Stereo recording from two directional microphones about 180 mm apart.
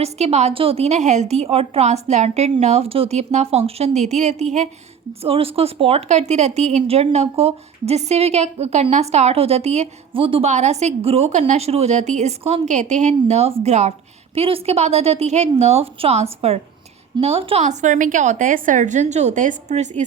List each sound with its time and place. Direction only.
0.0 s speech: 35° right (ahead or behind)